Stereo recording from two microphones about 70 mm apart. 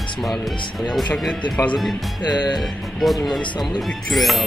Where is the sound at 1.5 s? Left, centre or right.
Centre.